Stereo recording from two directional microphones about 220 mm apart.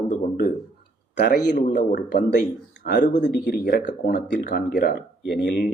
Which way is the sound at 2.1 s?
50° left (ahead or behind).